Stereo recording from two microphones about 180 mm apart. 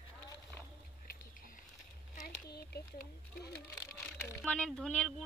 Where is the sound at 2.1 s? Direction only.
60° left (ahead or behind).